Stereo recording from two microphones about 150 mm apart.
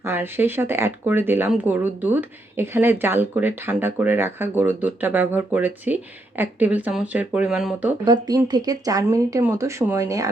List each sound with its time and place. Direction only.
0.0 s speech: 15° right (ahead or behind)
8.0 s speech: 25° right (ahead or behind)